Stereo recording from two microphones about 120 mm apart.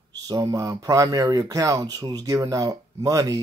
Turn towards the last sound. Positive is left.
turn(degrees=-30)  # may be behind; listen again after turning